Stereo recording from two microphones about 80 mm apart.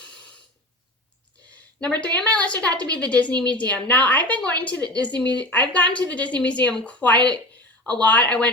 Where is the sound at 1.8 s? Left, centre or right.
Centre.